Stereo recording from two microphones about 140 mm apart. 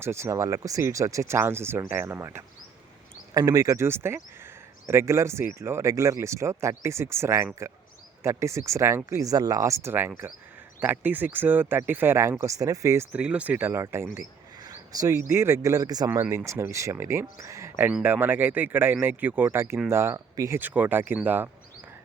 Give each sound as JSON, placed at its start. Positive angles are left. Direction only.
{"t": 0.0, "sound": "speech", "side_deg": -20}
{"t": 13.1, "sound": "a man's voice", "side_deg": -10}
{"t": 20.6, "sound": "speech", "side_deg": -10}